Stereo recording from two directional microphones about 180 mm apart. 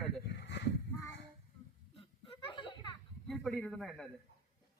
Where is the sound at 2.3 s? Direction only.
30° left (ahead or behind).